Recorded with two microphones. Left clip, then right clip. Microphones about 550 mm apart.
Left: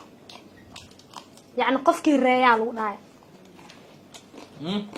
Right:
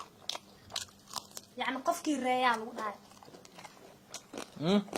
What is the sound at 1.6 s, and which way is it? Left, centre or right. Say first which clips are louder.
Speech: left 12 dB; left.